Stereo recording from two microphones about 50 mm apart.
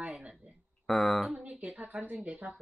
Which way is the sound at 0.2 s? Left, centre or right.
Right.